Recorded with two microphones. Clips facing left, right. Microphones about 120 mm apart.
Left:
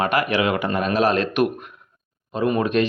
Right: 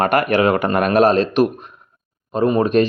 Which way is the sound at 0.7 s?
60° right (ahead or behind).